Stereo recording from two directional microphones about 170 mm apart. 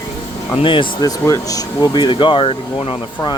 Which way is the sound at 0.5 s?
30° left (ahead or behind).